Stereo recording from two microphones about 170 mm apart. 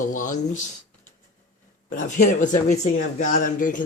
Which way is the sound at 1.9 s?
50° left (ahead or behind).